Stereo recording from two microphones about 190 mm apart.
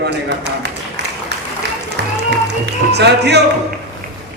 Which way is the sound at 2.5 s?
60° right (ahead or behind).